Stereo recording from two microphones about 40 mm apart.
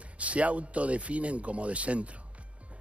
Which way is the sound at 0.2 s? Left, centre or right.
Right.